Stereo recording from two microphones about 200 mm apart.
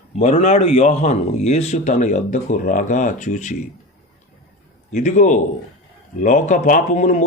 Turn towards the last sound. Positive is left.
turn(degrees=35)  # may be behind; listen again after turning